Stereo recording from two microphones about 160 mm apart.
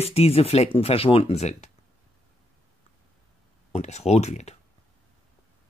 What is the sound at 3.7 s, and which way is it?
Speech, 45° left (ahead or behind).